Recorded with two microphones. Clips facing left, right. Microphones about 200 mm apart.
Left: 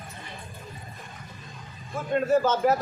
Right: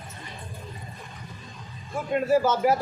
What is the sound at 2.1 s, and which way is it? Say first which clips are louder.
Speech: even; 10° right (ahead or behind).